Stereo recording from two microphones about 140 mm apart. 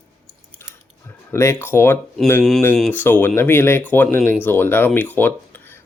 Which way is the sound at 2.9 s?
15° left (ahead or behind).